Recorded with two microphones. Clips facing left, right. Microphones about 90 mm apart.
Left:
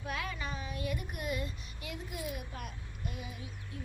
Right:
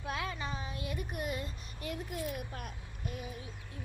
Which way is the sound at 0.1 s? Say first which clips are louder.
Right 1 dB; 30° right (ahead or behind).